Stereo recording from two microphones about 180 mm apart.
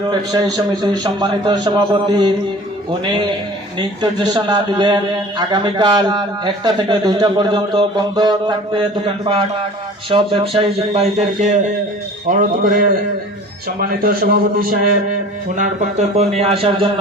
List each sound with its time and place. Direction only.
0.1 s a man's voice: 20° right (ahead or behind)